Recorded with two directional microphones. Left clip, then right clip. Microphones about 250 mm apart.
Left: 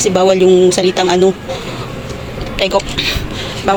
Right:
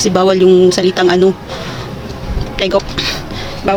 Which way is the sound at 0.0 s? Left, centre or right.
Centre.